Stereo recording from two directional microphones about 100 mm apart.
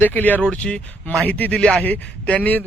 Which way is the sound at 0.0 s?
15° left (ahead or behind).